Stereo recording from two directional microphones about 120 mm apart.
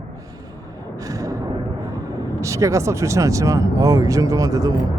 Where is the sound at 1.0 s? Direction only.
30° right (ahead or behind).